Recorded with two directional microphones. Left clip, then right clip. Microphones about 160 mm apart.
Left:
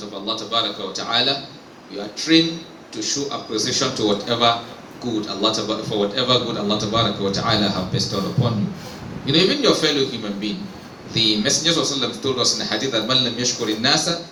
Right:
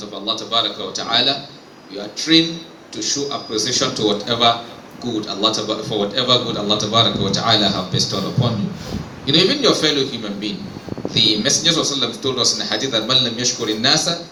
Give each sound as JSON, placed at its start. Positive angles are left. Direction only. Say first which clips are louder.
{"t": 0.3, "sound": "a man's voice", "louder": "right 3 dB", "side_deg": -55}